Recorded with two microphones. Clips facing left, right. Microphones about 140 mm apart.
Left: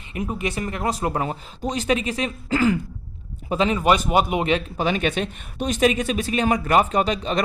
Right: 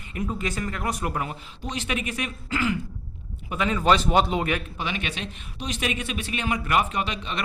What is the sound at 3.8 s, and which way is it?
Speech, 10° left (ahead or behind).